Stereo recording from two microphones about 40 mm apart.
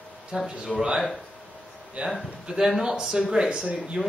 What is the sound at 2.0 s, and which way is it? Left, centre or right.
Speech, right.